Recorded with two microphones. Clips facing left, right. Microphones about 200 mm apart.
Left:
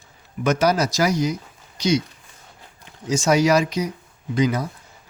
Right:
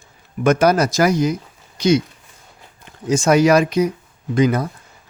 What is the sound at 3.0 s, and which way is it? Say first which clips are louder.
Speech: right 4 dB; 55° right (ahead or behind).